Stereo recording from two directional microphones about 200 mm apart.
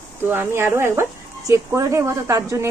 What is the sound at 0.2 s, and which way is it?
Speech, 10° right (ahead or behind).